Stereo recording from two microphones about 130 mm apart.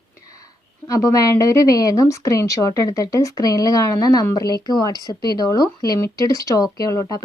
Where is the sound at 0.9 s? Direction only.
25° left (ahead or behind).